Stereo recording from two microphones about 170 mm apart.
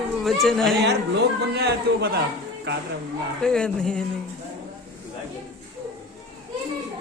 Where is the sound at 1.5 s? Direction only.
70° right (ahead or behind).